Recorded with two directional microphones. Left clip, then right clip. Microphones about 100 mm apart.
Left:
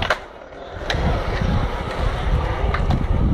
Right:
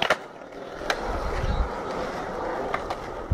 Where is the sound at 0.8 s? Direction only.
Centre (ahead or behind).